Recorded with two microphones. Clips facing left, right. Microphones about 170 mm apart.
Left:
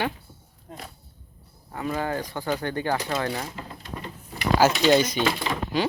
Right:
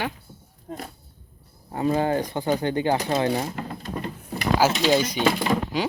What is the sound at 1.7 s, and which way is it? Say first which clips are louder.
Speech: right 6 dB; 30° right (ahead or behind).